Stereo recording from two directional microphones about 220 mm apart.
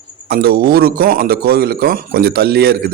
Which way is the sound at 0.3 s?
45° right (ahead or behind).